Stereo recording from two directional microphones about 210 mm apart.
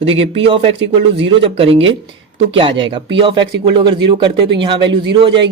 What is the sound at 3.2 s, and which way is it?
A woman's voice, 20° right (ahead or behind).